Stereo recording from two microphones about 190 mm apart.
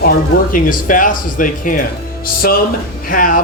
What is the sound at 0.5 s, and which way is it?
Speech, 45° left (ahead or behind).